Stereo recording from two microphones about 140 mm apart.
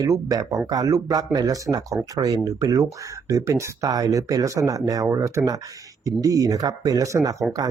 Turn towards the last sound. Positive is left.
turn(degrees=-25)  # may be behind; listen again after turning